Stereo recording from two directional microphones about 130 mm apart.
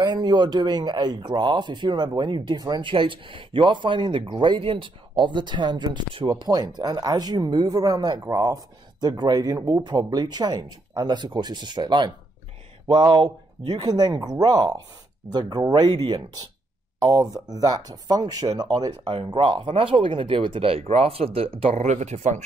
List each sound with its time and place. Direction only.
0.0 s speech: 35° right (ahead or behind)
21.7 s speech: 65° right (ahead or behind)